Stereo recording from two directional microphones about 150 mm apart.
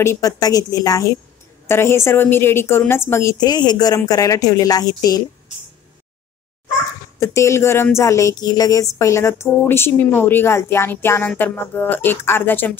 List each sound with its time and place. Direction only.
0.0 s a woman's voice: 20° left (ahead or behind)
7.2 s speech: 20° left (ahead or behind)